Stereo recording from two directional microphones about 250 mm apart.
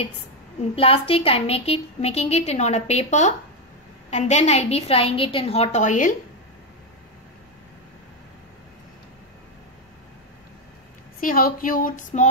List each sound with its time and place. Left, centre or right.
0.7 s a woman's voice: left
11.1 s speech: left